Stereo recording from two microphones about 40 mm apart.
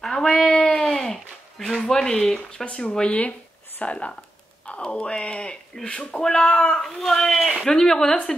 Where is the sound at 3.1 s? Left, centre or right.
Left.